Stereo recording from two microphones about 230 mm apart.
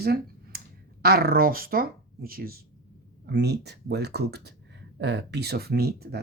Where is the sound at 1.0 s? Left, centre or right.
Right.